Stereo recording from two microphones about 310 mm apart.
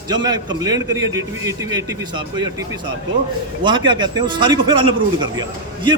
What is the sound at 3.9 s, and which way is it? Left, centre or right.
A man's voice, centre.